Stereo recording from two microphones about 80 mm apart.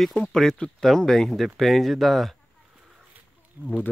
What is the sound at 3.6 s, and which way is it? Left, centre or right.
Speech, right.